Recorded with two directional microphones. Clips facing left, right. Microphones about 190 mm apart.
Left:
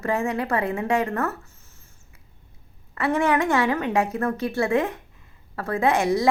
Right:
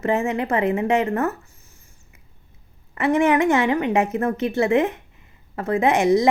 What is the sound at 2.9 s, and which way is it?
A woman's voice, 20° right (ahead or behind).